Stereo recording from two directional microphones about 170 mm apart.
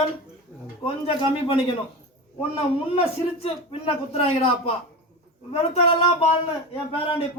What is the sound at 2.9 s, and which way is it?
A man's voice, 35° left (ahead or behind).